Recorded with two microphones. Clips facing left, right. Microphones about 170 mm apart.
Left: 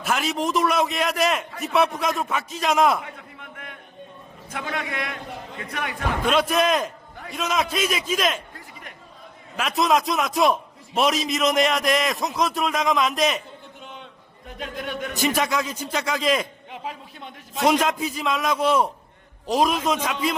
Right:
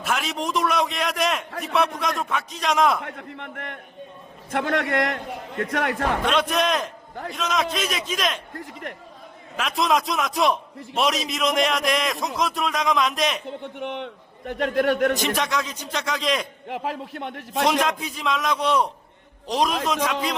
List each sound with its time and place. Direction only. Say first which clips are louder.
0.0 s a man's voice: left 2 dB; centre (ahead or behind)
3.0 s a sound: right 5 dB; 65° right (ahead or behind)
4.5 s a man's voice: right 7 dB; 70° right (ahead or behind)
6.2 s a man's voice: left 4 dB; 5° left (ahead or behind)
8.5 s a man's voice: right 8 dB; 65° right (ahead or behind)
9.6 s a man's voice: left 1 dB; centre (ahead or behind)
13.6 s a man's voice: right 11 dB; 70° right (ahead or behind)
15.2 s a man's voice: left 2 dB; 5° left (ahead or behind)
16.6 s a man's voice: right 6 dB; 70° right (ahead or behind)
17.6 s a man's voice: left 1 dB; 5° left (ahead or behind)